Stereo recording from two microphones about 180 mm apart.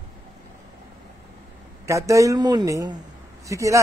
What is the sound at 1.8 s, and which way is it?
Speech, 15° right (ahead or behind).